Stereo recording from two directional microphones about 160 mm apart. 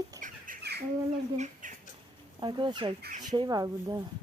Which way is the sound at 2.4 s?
30° right (ahead or behind).